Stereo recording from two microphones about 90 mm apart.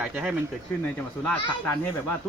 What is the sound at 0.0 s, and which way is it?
Speech, 10° right (ahead or behind).